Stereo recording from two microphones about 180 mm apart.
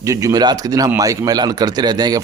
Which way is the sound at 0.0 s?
20° right (ahead or behind).